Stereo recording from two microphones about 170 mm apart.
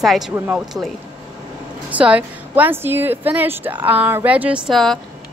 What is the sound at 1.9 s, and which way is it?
A woman's voice, 10° right (ahead or behind).